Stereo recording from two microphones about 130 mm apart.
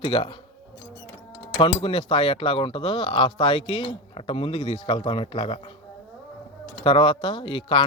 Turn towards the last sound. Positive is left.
turn(degrees=40)  # may be behind; listen again after turning